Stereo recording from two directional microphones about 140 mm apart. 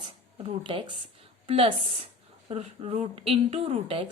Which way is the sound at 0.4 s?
40° right (ahead or behind).